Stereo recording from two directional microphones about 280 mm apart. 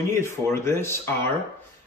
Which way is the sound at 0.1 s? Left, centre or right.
Centre.